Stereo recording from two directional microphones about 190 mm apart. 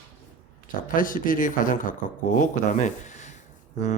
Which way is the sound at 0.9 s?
45° left (ahead or behind).